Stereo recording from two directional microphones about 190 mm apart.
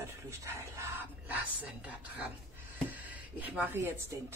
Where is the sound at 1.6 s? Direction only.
10° right (ahead or behind).